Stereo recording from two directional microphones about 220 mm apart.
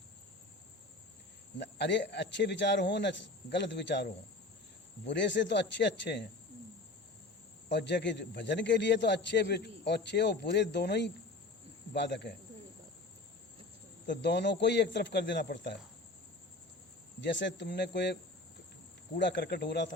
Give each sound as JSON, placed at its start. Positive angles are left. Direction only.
{"t": 1.5, "sound": "a man's voice", "side_deg": 50}
{"t": 7.7, "sound": "a man's voice", "side_deg": 50}
{"t": 14.1, "sound": "a man's voice", "side_deg": 50}
{"t": 17.2, "sound": "a man's voice", "side_deg": 55}